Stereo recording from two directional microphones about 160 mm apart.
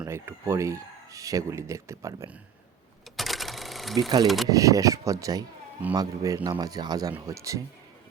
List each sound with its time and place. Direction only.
0.0 s speech: 15° right (ahead or behind)
3.2 s a sound: centre (ahead or behind)
4.4 s speech: 20° right (ahead or behind)